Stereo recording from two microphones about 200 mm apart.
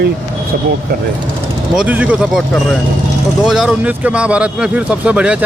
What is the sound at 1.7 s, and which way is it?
Speech, 5° right (ahead or behind).